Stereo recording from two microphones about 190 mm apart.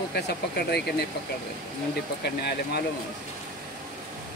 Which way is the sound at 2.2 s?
60° left (ahead or behind).